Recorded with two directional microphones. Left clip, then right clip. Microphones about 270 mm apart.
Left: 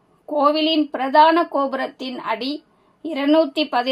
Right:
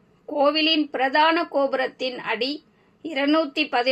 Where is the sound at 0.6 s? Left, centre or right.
Centre.